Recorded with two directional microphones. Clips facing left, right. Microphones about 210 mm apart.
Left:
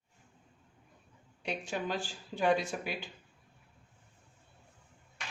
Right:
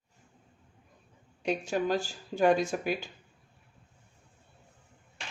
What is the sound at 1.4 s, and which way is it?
Speech, 40° right (ahead or behind).